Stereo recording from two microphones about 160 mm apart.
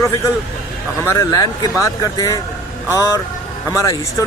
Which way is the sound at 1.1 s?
20° left (ahead or behind).